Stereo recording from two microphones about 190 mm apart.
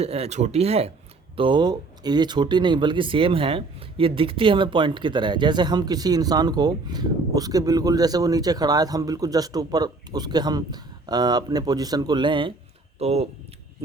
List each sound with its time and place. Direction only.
0.0 s speech: 35° right (ahead or behind)